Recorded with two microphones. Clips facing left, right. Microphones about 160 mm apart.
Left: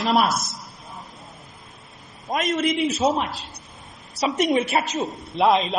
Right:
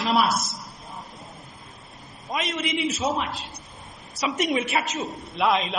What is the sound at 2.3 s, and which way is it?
Speech, 45° left (ahead or behind).